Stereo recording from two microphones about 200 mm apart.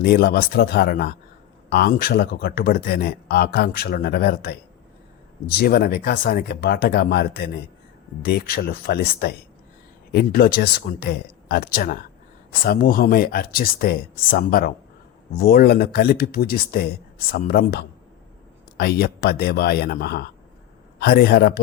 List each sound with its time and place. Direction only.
0.0 s speech: 55° left (ahead or behind)